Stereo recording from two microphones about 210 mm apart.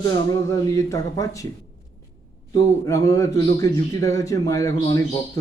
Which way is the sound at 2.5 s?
15° left (ahead or behind).